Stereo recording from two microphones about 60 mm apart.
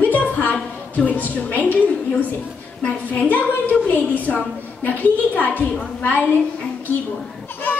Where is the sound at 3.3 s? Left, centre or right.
Left.